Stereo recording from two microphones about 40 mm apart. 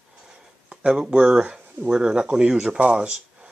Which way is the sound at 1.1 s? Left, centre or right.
Right.